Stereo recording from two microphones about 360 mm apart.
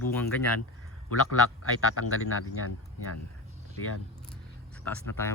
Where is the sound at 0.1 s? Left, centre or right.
Centre.